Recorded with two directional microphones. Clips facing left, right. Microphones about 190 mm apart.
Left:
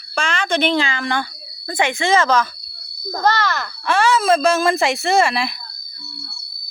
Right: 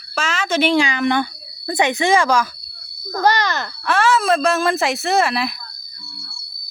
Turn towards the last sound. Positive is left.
turn(degrees=0)  # may be behind; listen again after turning